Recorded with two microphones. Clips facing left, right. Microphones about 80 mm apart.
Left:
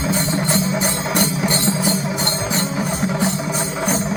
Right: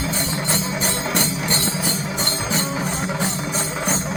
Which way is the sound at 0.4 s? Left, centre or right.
Centre.